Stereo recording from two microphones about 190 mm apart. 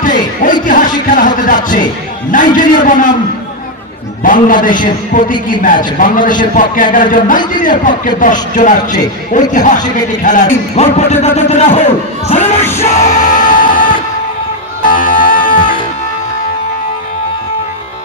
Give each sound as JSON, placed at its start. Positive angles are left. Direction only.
{"t": 0.0, "sound": "a sound", "side_deg": 45}
{"t": 2.3, "sound": "a man's voice", "side_deg": 45}
{"t": 4.2, "sound": "a man's voice", "side_deg": 45}
{"t": 12.7, "sound": "music", "side_deg": 35}